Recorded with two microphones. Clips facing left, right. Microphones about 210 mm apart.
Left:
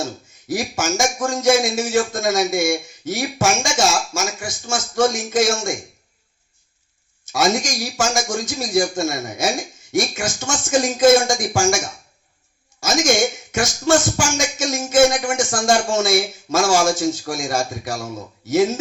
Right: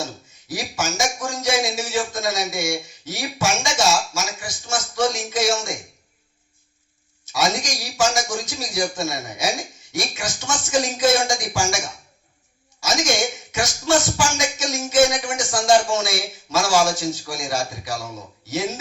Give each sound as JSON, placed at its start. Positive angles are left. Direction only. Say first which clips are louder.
{"t": 0.4, "sound": "speech", "louder": "left 5 dB", "side_deg": 50}
{"t": 7.3, "sound": "speech", "louder": "left 4 dB", "side_deg": 50}
{"t": 13.5, "sound": "speech", "louder": "left 2 dB", "side_deg": 50}